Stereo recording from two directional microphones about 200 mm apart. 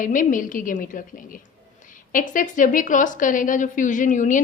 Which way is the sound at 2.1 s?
40° left (ahead or behind).